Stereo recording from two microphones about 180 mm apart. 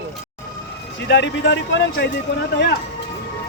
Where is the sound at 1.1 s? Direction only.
80° left.